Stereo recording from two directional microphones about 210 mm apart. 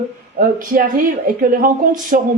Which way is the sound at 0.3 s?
40° right (ahead or behind).